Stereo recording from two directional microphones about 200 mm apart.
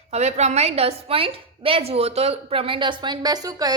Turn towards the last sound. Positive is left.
turn(degrees=-20)  # may be behind; listen again after turning